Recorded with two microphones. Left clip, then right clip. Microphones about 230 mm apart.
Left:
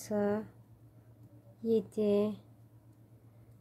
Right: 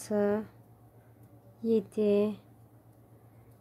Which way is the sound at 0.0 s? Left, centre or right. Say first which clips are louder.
Right 4 dB; centre.